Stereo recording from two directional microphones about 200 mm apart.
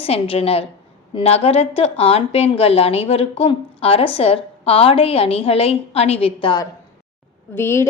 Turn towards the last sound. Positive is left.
turn(degrees=10)  # may be behind; listen again after turning